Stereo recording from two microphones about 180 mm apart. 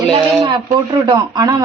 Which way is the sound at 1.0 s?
25° right (ahead or behind).